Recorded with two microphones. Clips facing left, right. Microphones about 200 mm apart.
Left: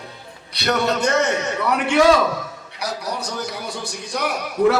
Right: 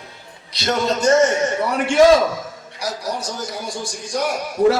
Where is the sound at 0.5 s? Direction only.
60° left (ahead or behind).